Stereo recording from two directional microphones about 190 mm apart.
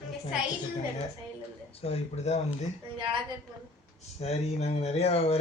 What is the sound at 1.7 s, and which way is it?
Speech, 30° left (ahead or behind).